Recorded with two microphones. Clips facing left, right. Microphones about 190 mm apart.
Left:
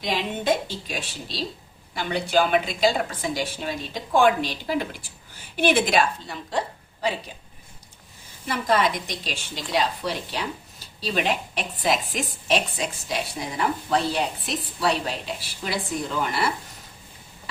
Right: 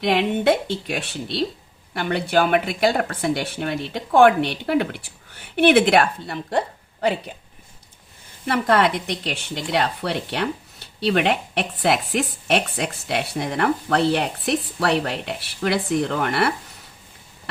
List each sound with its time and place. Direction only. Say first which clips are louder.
0.0 s a woman's voice: right 7 dB; 65° right (ahead or behind)
8.4 s a woman's voice: right 4 dB; 65° right (ahead or behind)